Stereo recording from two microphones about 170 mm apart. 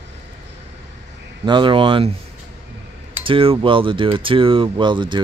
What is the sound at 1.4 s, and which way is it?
Speech, 30° right (ahead or behind).